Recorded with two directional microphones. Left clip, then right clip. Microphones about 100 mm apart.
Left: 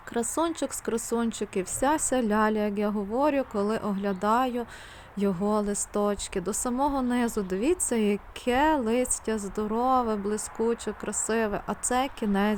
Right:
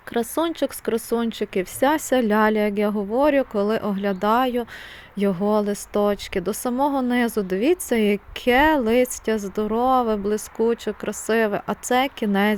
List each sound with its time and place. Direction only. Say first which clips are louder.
0.1 s a woman's voice: right 5 dB; 30° right (ahead or behind)